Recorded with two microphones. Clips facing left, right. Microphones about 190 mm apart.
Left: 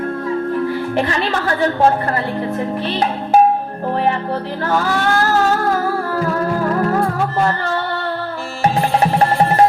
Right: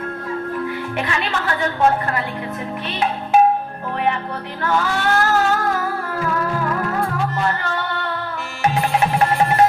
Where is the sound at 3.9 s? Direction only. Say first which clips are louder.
Left 4 dB; 35° left (ahead or behind).